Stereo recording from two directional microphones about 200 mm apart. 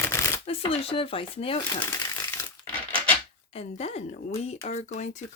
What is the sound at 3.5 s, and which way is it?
Speech, 30° left (ahead or behind).